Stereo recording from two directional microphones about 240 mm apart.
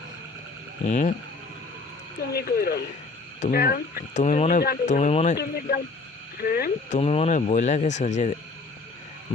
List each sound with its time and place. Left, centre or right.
0.9 s speech: left
2.3 s speech: left
7.0 s speech: left